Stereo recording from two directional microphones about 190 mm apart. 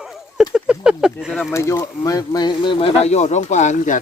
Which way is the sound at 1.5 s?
15° left (ahead or behind).